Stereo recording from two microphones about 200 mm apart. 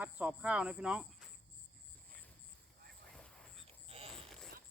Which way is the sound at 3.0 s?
Centre (ahead or behind).